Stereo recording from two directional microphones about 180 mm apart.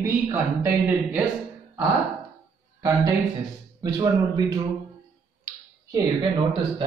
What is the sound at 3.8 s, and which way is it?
Speech, 20° right (ahead or behind).